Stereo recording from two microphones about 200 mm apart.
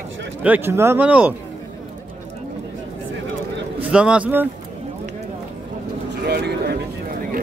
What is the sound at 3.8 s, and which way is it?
Speech, 5° right (ahead or behind).